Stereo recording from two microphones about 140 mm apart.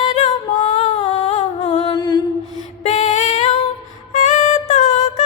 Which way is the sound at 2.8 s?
55° left (ahead or behind).